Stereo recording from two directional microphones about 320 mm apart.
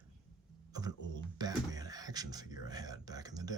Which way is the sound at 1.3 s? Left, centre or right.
Centre.